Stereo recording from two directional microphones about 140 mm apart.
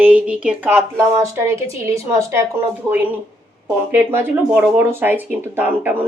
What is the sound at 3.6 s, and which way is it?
Speech, 15° right (ahead or behind).